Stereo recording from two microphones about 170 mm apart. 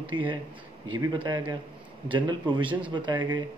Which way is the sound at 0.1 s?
30° right (ahead or behind).